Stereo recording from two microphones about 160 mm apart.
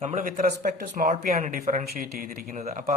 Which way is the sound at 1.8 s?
65° right (ahead or behind).